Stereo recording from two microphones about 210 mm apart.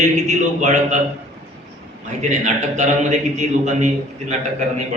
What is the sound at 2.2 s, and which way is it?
A man's voice, 35° right (ahead or behind).